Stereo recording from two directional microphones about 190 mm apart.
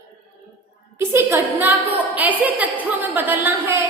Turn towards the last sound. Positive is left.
turn(degrees=-10)  # may be behind; listen again after turning